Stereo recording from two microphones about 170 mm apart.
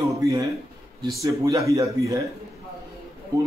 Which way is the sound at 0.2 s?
20° right (ahead or behind).